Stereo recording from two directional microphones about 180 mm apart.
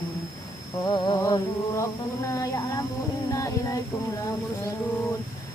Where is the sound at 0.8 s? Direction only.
20° left (ahead or behind).